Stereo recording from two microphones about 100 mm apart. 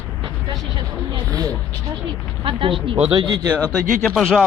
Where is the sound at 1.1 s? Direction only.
40° right (ahead or behind).